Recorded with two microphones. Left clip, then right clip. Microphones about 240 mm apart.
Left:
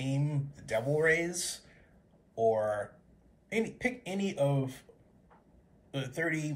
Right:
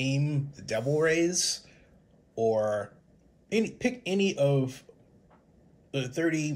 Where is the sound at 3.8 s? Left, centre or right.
Right.